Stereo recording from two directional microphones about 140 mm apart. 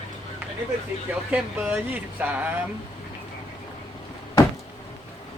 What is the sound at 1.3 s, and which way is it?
Speech, 10° right (ahead or behind).